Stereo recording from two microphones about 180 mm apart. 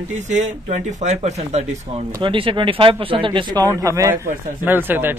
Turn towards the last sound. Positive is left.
turn(degrees=-10)  # may be behind; listen again after turning